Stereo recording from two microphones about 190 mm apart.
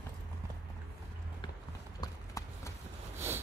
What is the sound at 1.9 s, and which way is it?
Clip-clop, 20° left (ahead or behind).